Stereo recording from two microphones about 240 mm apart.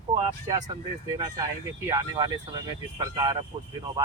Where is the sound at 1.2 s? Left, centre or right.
Centre.